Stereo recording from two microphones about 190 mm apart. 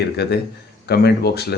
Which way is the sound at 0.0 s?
60° left (ahead or behind).